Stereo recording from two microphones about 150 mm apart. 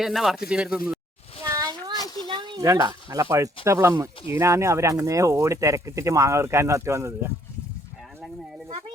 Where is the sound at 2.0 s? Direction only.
25° left (ahead or behind).